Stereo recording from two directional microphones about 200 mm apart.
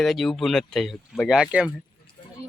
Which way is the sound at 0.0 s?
Centre (ahead or behind).